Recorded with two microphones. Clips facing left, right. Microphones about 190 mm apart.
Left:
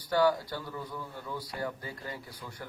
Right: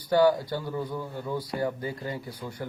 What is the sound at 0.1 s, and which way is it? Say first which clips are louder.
Speech: right 5 dB; 25° right (ahead or behind).